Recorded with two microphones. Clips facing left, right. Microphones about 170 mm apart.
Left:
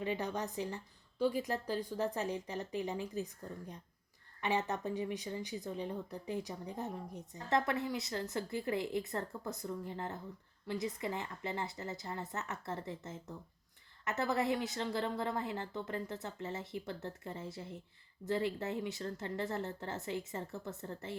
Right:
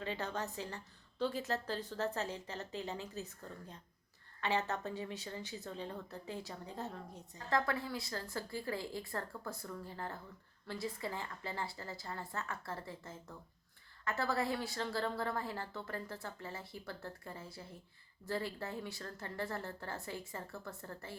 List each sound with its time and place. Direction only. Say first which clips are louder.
0.0 s a woman's voice: left 3 dB; 15° left (ahead or behind)